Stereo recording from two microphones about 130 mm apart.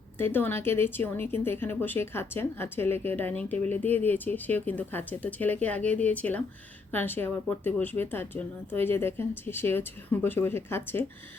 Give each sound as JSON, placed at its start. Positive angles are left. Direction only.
{"t": 0.2, "sound": "speech", "side_deg": 15}